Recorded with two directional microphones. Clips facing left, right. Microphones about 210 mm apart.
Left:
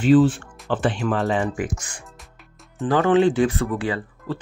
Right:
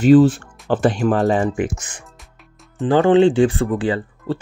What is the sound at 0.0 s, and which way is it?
Speech, 40° right (ahead or behind).